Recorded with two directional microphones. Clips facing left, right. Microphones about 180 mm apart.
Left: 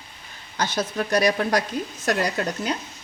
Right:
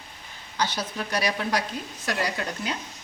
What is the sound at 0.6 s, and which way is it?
Speech, 45° left (ahead or behind).